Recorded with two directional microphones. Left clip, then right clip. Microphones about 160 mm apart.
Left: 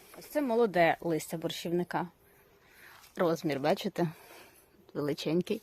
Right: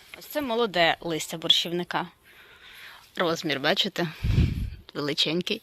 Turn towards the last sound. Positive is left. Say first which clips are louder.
# right 6 dB
turn(degrees=0)  # may be behind; listen again after turning